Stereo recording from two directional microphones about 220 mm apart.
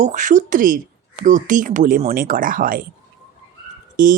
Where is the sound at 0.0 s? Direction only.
35° right (ahead or behind).